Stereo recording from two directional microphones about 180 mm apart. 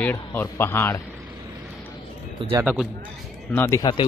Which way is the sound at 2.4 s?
30° right (ahead or behind).